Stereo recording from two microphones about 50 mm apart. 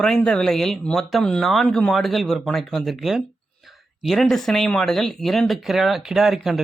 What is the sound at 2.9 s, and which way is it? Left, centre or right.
Speech, centre.